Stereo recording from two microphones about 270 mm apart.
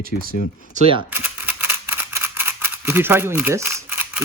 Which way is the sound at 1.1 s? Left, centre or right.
Centre.